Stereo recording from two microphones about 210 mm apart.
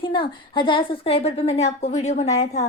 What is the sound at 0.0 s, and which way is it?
A woman's voice, 25° left (ahead or behind).